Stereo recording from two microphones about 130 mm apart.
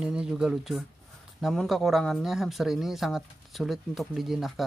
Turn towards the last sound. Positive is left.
turn(degrees=0)  # may be behind; listen again after turning